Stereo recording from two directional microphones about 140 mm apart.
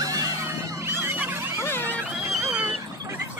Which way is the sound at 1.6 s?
15° left (ahead or behind).